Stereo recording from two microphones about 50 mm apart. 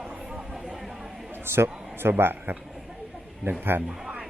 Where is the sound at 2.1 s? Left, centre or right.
Right.